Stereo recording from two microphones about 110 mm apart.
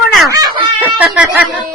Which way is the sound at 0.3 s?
30° right (ahead or behind).